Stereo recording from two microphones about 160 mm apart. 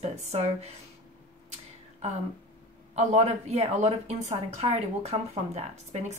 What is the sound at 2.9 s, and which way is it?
A woman's voice, 45° right (ahead or behind).